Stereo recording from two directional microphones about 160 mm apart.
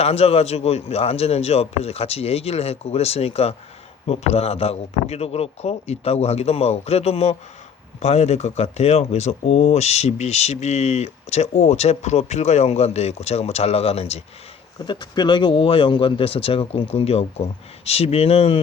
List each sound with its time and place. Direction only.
0.0 s a man's voice: 40° left (ahead or behind)
14.8 s a man's voice: 30° left (ahead or behind)